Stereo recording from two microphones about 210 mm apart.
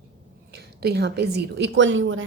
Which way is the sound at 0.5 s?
50° right (ahead or behind).